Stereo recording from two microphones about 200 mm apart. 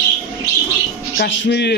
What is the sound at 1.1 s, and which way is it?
Speech, 60° left (ahead or behind).